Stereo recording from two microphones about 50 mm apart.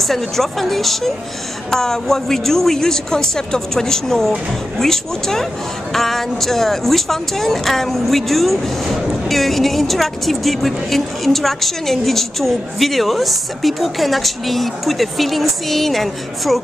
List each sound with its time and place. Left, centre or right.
0.0 s a woman's voice: centre